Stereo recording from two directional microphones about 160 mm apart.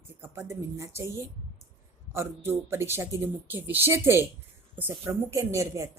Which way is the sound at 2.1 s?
15° right (ahead or behind).